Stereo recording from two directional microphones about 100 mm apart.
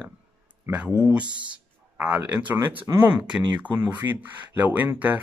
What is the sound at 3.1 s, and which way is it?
Speech, 15° right (ahead or behind).